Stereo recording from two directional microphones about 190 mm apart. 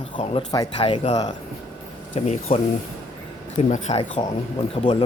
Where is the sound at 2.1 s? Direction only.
40° left (ahead or behind).